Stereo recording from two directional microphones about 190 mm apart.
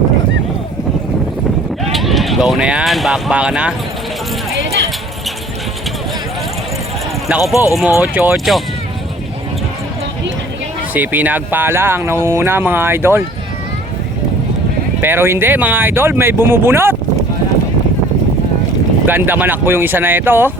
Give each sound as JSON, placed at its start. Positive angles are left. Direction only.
{"t": 1.9, "sound": "speech", "side_deg": 0}
{"t": 7.3, "sound": "speech", "side_deg": -5}
{"t": 7.5, "sound": "speech", "side_deg": 15}
{"t": 7.8, "sound": "speech", "side_deg": -5}
{"t": 10.9, "sound": "speech", "side_deg": -10}
{"t": 15.0, "sound": "speech", "side_deg": -10}
{"t": 19.0, "sound": "speech", "side_deg": -10}